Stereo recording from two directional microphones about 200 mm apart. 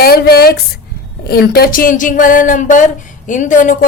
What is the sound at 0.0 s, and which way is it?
A woman's voice, 50° left (ahead or behind).